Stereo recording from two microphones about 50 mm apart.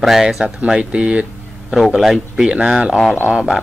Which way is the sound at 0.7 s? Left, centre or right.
Centre.